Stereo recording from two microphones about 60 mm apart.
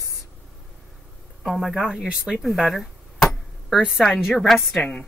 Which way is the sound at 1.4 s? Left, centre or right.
Centre.